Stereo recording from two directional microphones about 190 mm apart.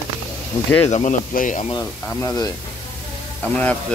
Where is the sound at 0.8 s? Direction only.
40° left (ahead or behind).